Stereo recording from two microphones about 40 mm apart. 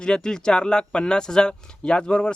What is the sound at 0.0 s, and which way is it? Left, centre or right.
A man's voice, left.